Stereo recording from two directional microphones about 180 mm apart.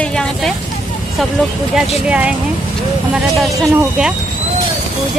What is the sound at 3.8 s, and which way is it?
Speech, 5° right (ahead or behind).